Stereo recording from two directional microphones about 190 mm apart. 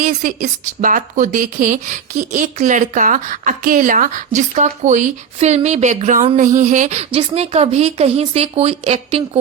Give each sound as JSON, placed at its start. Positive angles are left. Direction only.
{"t": 0.0, "sound": "speech", "side_deg": -40}